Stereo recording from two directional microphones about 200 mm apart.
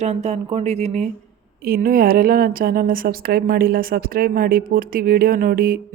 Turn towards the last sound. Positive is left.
turn(degrees=-45)  # may be behind; listen again after turning